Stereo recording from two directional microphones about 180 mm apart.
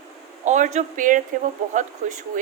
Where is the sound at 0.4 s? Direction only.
40° right (ahead or behind).